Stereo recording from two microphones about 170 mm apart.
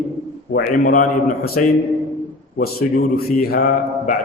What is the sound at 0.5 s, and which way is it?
Speech, 50° left (ahead or behind).